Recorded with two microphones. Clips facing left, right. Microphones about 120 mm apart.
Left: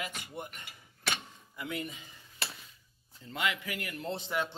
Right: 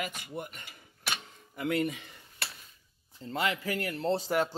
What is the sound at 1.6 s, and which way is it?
Speech, 60° right (ahead or behind).